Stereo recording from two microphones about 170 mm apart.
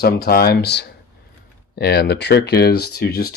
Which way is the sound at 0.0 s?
60° left (ahead or behind).